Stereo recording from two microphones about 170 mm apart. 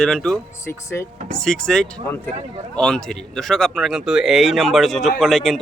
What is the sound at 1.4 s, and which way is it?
Speech, 5° left (ahead or behind).